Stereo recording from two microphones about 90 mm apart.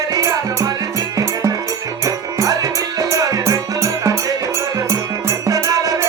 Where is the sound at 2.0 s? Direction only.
40° right (ahead or behind).